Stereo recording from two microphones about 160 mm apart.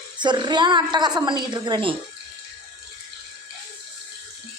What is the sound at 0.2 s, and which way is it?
A woman's voice, 30° right (ahead or behind).